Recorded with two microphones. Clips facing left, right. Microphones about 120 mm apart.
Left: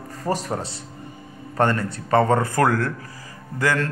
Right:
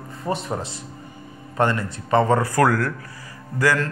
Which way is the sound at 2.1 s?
40° left (ahead or behind).